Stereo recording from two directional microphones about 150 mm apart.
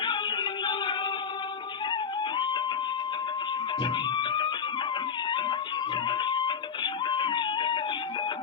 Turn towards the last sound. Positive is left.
turn(degrees=30)  # may be behind; listen again after turning